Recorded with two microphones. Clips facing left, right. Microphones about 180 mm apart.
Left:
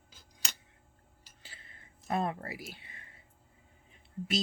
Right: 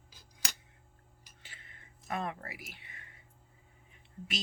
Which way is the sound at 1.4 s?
30° left (ahead or behind).